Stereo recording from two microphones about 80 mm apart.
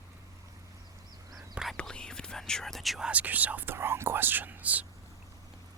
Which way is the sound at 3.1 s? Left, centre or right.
Centre.